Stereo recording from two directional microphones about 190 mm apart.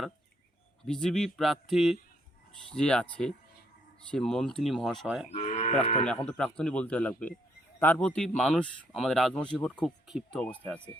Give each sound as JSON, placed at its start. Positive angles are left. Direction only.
{"t": 0.9, "sound": "speech", "side_deg": 5}
{"t": 5.3, "sound": "sheep", "side_deg": 35}
{"t": 5.8, "sound": "speech", "side_deg": 35}
{"t": 6.1, "sound": "speech", "side_deg": 5}